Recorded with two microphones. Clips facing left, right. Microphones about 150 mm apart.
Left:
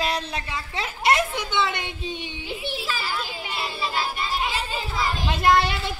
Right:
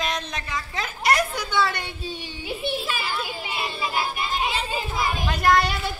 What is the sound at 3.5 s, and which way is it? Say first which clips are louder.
Music: even; 15° right (ahead or behind).